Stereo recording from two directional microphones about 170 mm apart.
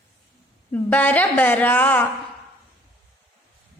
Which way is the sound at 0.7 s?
10° left (ahead or behind).